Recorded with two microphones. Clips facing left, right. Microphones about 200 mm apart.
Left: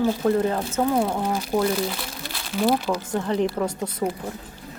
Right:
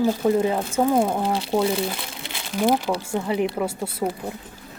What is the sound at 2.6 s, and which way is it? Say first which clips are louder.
Speech: right 1 dB; 10° right (ahead or behind).